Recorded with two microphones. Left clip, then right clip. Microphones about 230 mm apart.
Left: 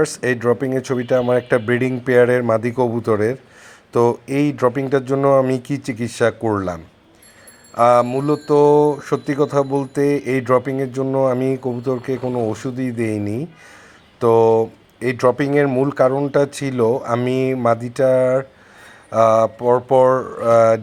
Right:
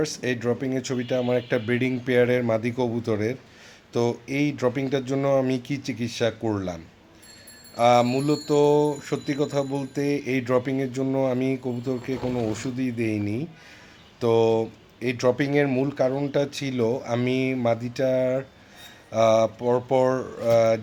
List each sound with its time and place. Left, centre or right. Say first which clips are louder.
0.0 s mantra: left 8 dB; left